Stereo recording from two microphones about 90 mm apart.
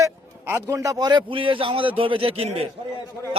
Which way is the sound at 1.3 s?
75° right (ahead or behind).